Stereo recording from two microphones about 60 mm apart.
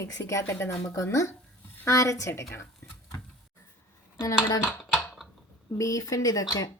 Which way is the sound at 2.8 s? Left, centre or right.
Left.